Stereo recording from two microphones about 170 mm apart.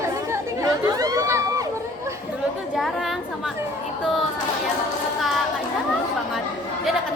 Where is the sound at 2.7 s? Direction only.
Centre (ahead or behind).